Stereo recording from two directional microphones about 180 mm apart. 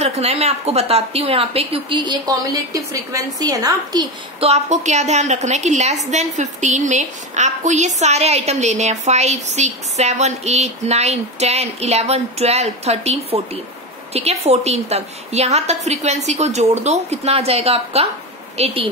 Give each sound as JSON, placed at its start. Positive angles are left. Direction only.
{"t": 0.0, "sound": "a woman's voice", "side_deg": -35}
{"t": 4.5, "sound": "a woman's voice", "side_deg": -40}